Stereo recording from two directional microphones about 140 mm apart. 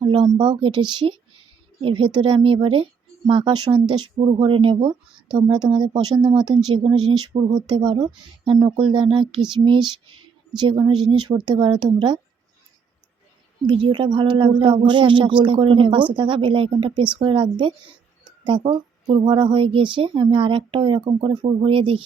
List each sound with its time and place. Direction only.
0.3 s speech: 35° right (ahead or behind)
13.7 s speech: 35° right (ahead or behind)